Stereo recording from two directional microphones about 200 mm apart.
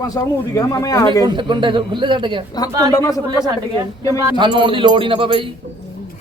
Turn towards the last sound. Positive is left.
turn(degrees=-25)  # may be behind; listen again after turning